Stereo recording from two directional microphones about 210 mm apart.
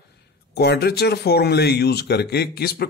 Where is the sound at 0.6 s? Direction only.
50° left (ahead or behind).